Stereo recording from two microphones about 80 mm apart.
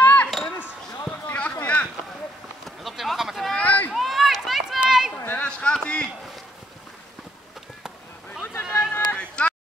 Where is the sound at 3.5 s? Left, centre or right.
Centre.